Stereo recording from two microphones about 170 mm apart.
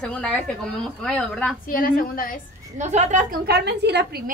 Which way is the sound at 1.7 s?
55° left (ahead or behind).